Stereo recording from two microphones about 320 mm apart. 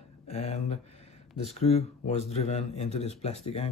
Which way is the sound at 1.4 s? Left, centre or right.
Centre.